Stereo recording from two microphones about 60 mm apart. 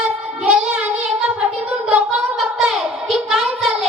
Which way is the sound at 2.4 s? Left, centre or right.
Centre.